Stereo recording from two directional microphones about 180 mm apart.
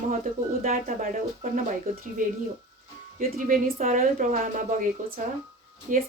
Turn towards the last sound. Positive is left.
turn(degrees=-45)  # may be behind; listen again after turning